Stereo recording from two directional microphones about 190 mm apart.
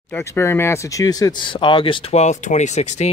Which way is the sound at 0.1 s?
15° left (ahead or behind).